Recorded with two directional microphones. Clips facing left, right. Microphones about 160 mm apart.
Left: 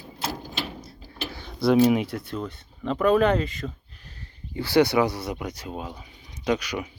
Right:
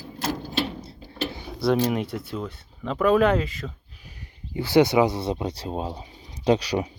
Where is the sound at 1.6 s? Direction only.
5° left (ahead or behind); by 6.9 s 35° right (ahead or behind).